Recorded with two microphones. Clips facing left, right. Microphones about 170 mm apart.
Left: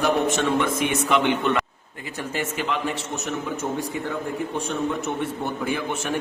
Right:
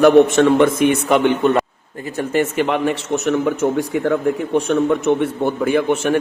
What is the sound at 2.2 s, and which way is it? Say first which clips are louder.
Speech: right 10 dB; 55° right (ahead or behind).